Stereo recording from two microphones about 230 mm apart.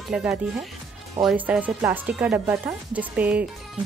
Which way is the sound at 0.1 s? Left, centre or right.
Centre.